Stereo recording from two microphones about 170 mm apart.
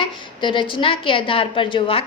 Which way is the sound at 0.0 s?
30° left (ahead or behind).